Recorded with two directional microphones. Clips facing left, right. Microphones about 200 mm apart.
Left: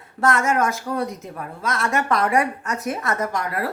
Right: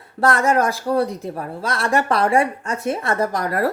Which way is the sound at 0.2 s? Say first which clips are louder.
Right 3 dB; 35° right (ahead or behind).